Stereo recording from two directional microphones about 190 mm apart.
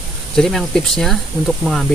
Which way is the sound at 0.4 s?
5° left (ahead or behind).